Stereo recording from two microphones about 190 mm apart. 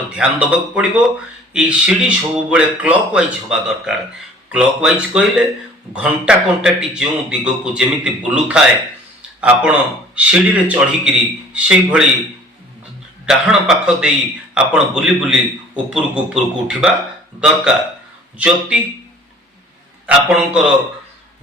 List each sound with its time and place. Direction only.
0.2 s a man's voice: 5° right (ahead or behind)
13.2 s a man's voice: 5° right (ahead or behind)
20.1 s a man's voice: 5° right (ahead or behind)